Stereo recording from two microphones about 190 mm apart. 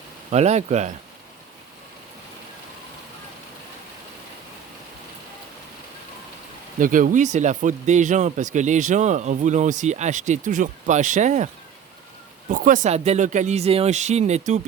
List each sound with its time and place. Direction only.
0.3 s speech: 35° right (ahead or behind)
6.7 s speech: 45° right (ahead or behind)
12.5 s speech: 45° right (ahead or behind)